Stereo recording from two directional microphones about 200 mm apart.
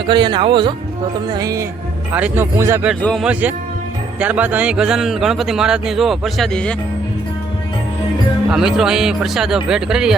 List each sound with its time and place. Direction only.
0.1 s speech: 25° right (ahead or behind)
2.9 s a man's voice: 5° left (ahead or behind)
4.2 s a man's voice: 5° right (ahead or behind)
8.4 s a man's voice: centre (ahead or behind)